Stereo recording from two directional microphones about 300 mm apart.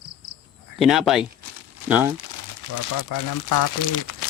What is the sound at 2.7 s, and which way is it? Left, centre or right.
Speech, left.